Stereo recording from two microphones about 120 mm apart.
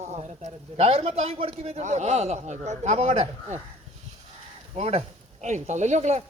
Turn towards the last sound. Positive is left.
turn(degrees=-70)  # may be behind; listen again after turning